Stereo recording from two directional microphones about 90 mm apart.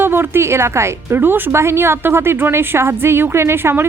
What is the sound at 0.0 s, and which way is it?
Speech, 25° right (ahead or behind).